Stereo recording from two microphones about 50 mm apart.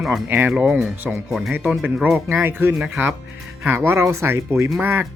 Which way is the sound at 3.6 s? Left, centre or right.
Right.